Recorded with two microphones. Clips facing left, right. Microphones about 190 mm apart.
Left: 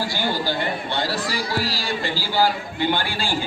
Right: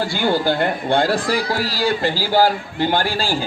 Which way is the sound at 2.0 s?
45° right (ahead or behind).